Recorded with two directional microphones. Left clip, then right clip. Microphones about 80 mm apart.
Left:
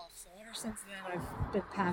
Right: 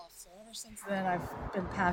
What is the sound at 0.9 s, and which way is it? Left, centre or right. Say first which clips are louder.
Speech: right 10 dB; right.